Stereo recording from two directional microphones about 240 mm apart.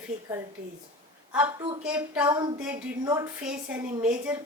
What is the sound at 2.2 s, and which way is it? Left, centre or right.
A woman's voice, centre.